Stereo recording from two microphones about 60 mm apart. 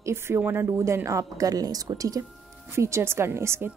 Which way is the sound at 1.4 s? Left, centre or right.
Right.